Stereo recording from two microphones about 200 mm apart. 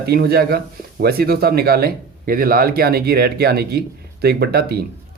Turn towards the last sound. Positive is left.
turn(degrees=-50)  # may be behind; listen again after turning